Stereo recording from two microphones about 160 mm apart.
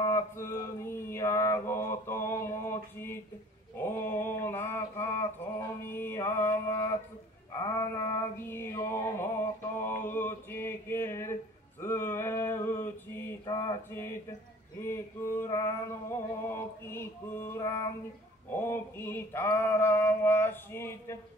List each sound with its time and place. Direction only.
0.0 s mantra: 20° left (ahead or behind)
7.8 s a sound: 15° left (ahead or behind)
9.8 s mantra: 15° left (ahead or behind)
14.8 s music: 15° left (ahead or behind)
18.5 s mantra: 15° left (ahead or behind)